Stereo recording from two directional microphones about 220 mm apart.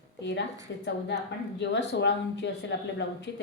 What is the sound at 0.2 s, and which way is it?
A woman's voice, 55° left (ahead or behind).